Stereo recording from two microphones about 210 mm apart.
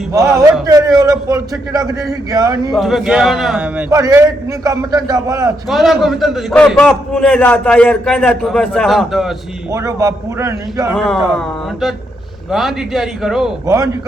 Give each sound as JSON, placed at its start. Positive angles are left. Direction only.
{"t": 0.1, "sound": "a man's voice", "side_deg": -15}
{"t": 2.7, "sound": "a man's voice", "side_deg": 0}
{"t": 5.7, "sound": "a man's voice", "side_deg": 0}
{"t": 9.7, "sound": "a man's voice", "side_deg": -15}
{"t": 10.9, "sound": "a man's voice", "side_deg": 0}
{"t": 13.7, "sound": "a man's voice", "side_deg": -15}